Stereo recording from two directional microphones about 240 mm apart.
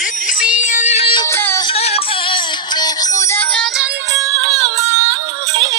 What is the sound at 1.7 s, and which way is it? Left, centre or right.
Music, left.